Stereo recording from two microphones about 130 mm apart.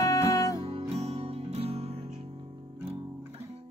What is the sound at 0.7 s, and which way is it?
Music, 50° right (ahead or behind).